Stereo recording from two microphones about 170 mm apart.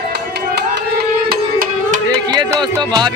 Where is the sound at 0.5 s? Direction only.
70° right (ahead or behind).